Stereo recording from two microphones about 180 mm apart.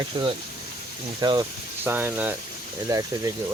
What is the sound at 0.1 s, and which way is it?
Speech, 30° right (ahead or behind).